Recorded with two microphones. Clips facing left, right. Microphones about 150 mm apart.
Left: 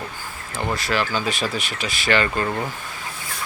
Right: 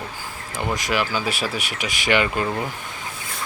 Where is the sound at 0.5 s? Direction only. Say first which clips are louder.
Even; 15° right (ahead or behind).